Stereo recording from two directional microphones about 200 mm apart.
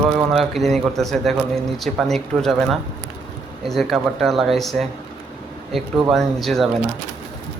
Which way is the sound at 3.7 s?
Centre (ahead or behind).